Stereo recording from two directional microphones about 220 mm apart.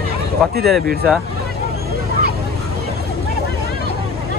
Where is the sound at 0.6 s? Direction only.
Centre (ahead or behind).